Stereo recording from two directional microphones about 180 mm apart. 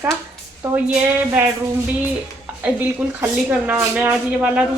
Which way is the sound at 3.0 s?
10° right (ahead or behind).